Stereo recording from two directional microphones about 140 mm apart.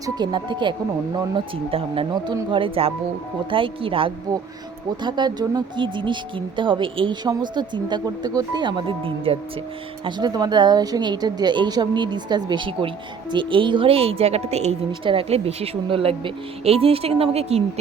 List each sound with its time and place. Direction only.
0.0 s a woman's voice: 30° right (ahead or behind)